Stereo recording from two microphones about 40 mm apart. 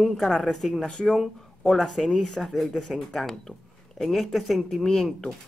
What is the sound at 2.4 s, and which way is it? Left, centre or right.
Speech, centre.